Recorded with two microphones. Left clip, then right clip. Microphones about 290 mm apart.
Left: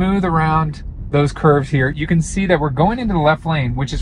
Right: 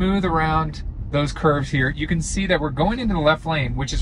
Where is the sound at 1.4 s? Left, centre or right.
Centre.